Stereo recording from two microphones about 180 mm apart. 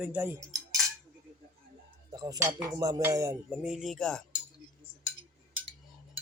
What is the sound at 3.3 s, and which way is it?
Speech, 5° right (ahead or behind).